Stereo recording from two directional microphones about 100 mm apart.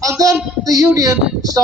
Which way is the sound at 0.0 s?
35° right (ahead or behind).